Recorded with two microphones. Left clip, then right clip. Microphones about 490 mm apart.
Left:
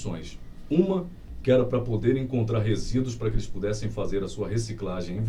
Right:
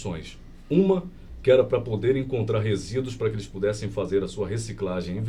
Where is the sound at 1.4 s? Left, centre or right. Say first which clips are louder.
Right 3 dB; right.